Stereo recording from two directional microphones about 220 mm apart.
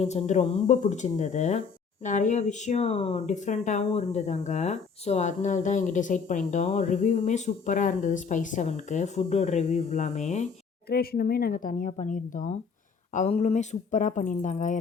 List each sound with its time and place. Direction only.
0.0 s speech: 30° left (ahead or behind)
10.8 s speech: 45° left (ahead or behind)